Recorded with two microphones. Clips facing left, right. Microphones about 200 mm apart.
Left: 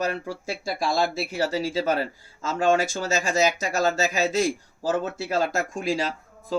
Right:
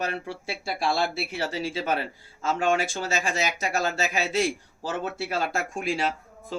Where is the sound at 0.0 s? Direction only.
40° left (ahead or behind).